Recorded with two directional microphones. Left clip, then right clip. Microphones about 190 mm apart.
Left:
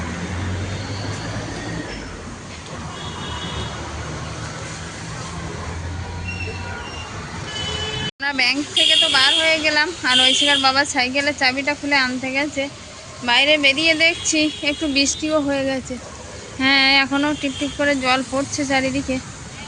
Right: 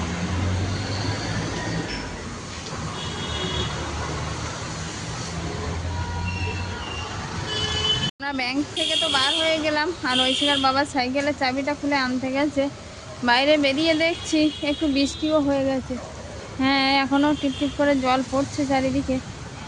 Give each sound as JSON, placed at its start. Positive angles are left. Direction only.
{"t": 8.2, "sound": "speech", "side_deg": -5}